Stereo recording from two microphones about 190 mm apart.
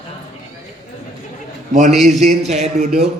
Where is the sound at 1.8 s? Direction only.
35° right (ahead or behind).